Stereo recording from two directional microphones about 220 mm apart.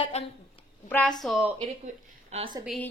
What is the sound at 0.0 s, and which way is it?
Speech, 25° left (ahead or behind).